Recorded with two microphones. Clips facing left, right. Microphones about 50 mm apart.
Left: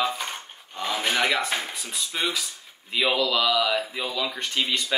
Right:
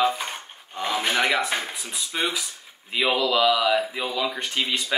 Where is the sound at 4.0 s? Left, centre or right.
Right.